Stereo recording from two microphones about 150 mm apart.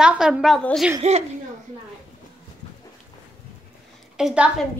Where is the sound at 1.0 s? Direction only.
50° right (ahead or behind).